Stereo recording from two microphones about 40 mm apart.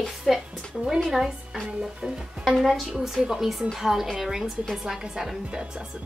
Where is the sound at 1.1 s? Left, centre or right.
Centre.